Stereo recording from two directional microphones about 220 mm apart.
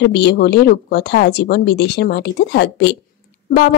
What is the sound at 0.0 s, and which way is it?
Speech, 50° left (ahead or behind).